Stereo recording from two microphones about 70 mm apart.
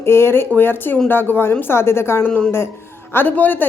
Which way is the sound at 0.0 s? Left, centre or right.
Left.